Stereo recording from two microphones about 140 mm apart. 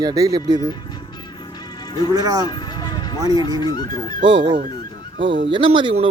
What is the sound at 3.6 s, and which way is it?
Speech, 30° left (ahead or behind).